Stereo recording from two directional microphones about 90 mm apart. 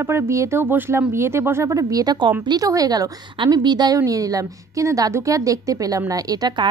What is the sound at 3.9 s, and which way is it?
A woman's voice, 40° right (ahead or behind).